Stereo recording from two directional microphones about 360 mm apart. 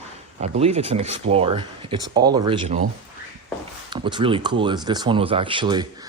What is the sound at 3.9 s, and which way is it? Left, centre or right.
Speech, centre.